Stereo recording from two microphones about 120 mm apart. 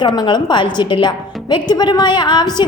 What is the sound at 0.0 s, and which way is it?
A woman's voice, 35° left (ahead or behind).